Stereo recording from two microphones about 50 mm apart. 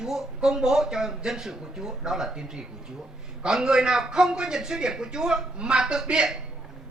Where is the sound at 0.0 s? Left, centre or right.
Centre.